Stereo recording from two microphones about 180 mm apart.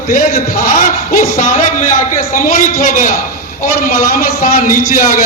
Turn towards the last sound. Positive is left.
turn(degrees=45)  # may be behind; listen again after turning